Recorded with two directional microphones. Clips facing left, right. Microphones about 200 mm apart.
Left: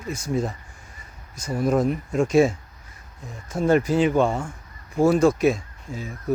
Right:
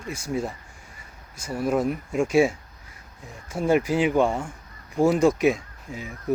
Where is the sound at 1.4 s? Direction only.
5° right (ahead or behind).